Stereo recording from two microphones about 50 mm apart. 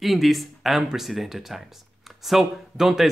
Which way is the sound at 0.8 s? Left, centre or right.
Centre.